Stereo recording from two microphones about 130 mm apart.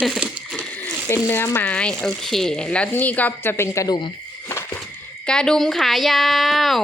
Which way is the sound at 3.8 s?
30° left (ahead or behind).